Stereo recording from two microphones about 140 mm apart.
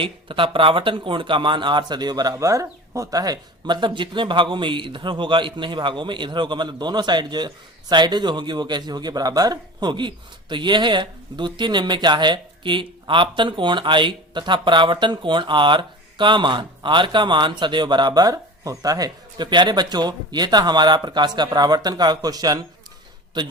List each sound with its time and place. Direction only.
0.0 s speech: 40° right (ahead or behind)